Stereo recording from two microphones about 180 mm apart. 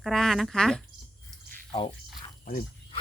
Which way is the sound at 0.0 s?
Centre (ahead or behind).